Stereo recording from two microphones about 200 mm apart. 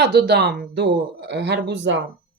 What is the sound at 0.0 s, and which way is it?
Speech, 55° right (ahead or behind).